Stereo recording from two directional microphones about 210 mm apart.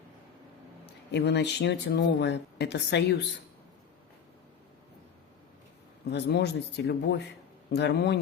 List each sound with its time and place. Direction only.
1.1 s speech: 55° left (ahead or behind)
6.1 s speech: 55° left (ahead or behind)